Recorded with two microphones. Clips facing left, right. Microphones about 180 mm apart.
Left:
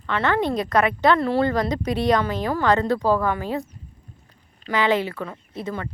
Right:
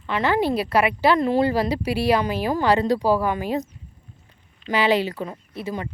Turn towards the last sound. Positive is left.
turn(degrees=-15)  # may be behind; listen again after turning